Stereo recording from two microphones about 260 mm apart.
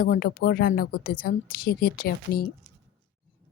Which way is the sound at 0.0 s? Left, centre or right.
Left.